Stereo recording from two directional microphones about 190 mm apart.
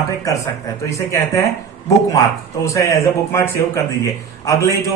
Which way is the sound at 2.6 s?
15° left (ahead or behind).